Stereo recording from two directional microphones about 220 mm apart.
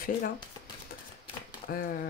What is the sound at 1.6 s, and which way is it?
Speech, 40° left (ahead or behind).